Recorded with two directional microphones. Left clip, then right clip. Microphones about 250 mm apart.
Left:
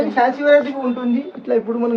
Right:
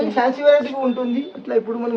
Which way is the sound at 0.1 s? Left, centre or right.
Right.